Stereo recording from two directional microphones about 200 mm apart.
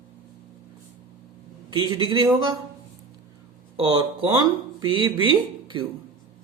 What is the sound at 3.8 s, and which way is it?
Speech, 25° right (ahead or behind).